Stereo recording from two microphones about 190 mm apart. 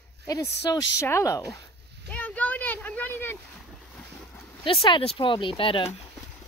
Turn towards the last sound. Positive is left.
turn(degrees=30)  # may be behind; listen again after turning